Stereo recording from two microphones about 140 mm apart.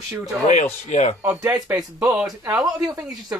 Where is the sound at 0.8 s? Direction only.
55° left (ahead or behind).